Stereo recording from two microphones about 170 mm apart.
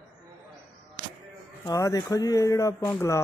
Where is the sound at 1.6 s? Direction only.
20° left (ahead or behind).